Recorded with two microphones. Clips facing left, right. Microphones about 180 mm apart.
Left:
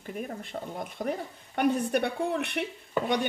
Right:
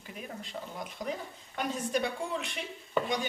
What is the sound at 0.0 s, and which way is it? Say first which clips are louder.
Speech: left 6 dB; 50° left (ahead or behind).